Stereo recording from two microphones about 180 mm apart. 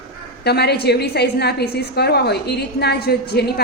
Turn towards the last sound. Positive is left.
turn(degrees=60)  # may be behind; listen again after turning